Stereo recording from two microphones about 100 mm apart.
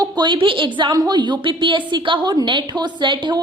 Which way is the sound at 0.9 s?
40° right (ahead or behind).